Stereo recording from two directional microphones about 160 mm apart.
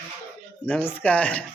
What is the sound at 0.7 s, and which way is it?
Speech, 10° left (ahead or behind).